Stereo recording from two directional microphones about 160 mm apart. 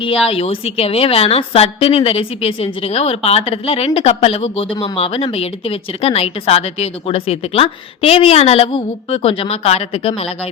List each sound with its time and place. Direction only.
0.0 s a woman's voice: 40° left (ahead or behind)